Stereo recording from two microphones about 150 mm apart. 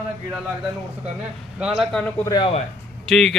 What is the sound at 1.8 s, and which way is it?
Speech, 5° left (ahead or behind).